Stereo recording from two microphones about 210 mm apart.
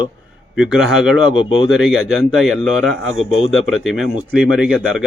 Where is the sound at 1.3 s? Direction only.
25° left (ahead or behind).